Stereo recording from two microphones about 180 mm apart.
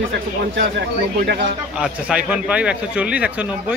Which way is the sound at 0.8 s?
75° right (ahead or behind).